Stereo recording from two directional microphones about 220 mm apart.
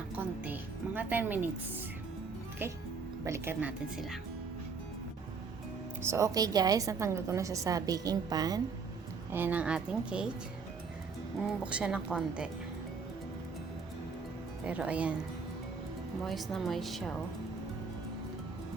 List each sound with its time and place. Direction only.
0.4 s music: 10° right (ahead or behind)
3.2 s a woman's voice: 10° right (ahead or behind)
6.0 s a woman's voice: 10° right (ahead or behind)
11.4 s a woman's voice: 5° right (ahead or behind)
14.7 s a woman's voice: 5° right (ahead or behind)
16.2 s a woman's voice: centre (ahead or behind)